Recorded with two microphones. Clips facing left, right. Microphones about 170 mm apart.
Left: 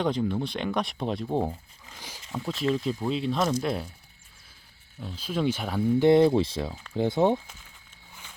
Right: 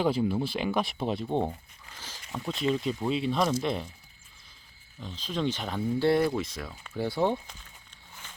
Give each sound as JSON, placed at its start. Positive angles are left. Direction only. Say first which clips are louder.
{"t": 0.0, "sound": "speech", "louder": "even", "side_deg": -5}
{"t": 2.0, "sound": "a sound", "louder": "left 2 dB", "side_deg": 10}
{"t": 2.3, "sound": "speech", "louder": "left 1 dB", "side_deg": 0}
{"t": 4.9, "sound": "speech", "louder": "left 3 dB", "side_deg": 10}
{"t": 6.0, "sound": "speech", "louder": "left 6 dB", "side_deg": 20}
{"t": 8.1, "sound": "a sound", "louder": "even", "side_deg": 10}